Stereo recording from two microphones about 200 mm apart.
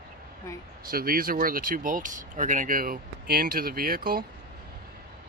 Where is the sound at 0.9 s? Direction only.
45° right (ahead or behind).